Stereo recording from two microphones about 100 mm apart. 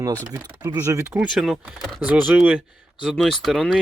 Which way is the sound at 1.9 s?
15° right (ahead or behind).